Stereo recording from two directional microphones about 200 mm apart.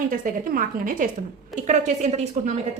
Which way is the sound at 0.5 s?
45° right (ahead or behind).